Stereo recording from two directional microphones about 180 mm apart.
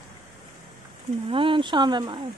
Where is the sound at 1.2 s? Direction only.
30° right (ahead or behind).